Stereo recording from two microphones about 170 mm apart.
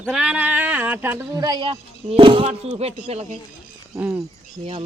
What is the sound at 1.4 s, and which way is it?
Speech, 25° right (ahead or behind).